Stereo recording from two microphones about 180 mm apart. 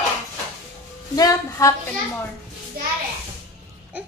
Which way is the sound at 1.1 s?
20° left (ahead or behind).